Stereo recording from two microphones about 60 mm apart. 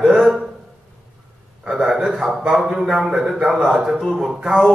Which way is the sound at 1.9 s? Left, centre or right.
Centre.